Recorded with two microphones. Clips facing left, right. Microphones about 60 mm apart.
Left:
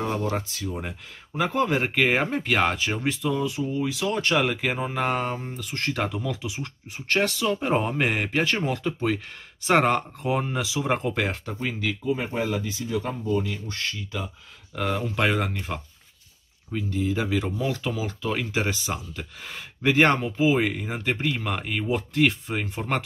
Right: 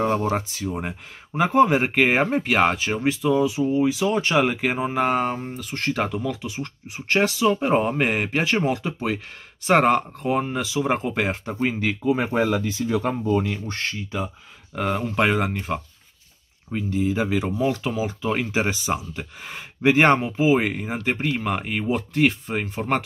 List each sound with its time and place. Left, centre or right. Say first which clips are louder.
0.0 s speech: right 5 dB; right
0.4 s speech: right 3 dB; centre
7.1 s speech: right 4 dB; centre
11.6 s speech: right 5 dB; right
12.1 s speech: right 6 dB; right
13.1 s speech: right 4 dB; right
14.8 s speech: right 3 dB; centre
16.7 s speech: right 3 dB; centre
17.5 s speech: right 4 dB; right